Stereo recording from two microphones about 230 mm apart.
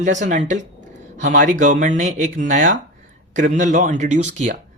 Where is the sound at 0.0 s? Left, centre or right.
Right.